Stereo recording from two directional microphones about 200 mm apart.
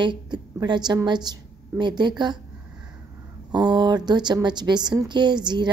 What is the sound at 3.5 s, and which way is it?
A woman's voice, 20° right (ahead or behind).